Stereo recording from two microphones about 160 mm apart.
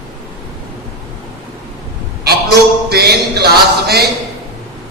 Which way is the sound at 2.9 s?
85° right.